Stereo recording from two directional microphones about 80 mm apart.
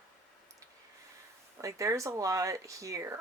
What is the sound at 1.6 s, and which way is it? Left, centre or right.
Speech, right.